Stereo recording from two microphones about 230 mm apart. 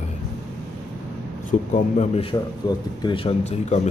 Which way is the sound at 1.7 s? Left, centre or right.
Left.